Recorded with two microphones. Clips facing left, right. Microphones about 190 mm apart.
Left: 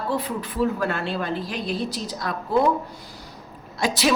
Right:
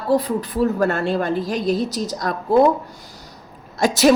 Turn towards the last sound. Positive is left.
turn(degrees=-45)  # may be behind; listen again after turning